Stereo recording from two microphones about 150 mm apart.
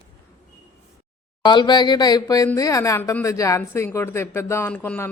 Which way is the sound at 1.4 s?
30° left (ahead or behind).